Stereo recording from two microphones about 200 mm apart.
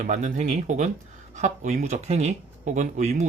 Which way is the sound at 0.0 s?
40° right (ahead or behind).